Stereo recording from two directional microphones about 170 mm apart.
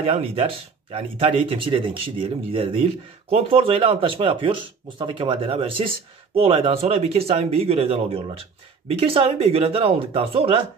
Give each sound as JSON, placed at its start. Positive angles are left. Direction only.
{"t": 0.0, "sound": "speech", "side_deg": -35}